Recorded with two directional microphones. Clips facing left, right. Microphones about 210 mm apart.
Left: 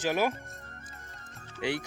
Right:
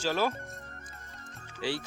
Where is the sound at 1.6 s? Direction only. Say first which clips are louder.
Left 2 dB; 20° left (ahead or behind).